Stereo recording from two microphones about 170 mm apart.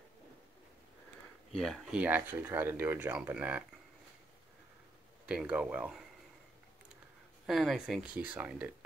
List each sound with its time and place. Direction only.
1.5 s speech: centre (ahead or behind)
5.2 s speech: 5° right (ahead or behind)
7.4 s speech: centre (ahead or behind)